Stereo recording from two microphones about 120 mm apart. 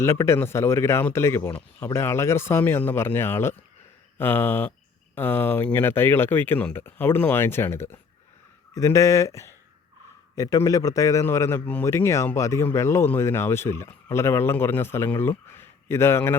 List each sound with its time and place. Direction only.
0.0 s a man's voice: 20° left (ahead or behind)